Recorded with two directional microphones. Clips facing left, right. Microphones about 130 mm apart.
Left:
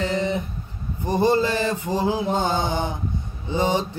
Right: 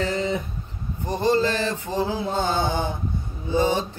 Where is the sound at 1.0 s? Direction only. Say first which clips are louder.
Left 2 dB; 10° left (ahead or behind).